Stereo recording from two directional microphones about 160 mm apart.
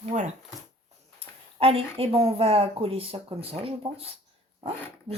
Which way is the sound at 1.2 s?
40° right (ahead or behind).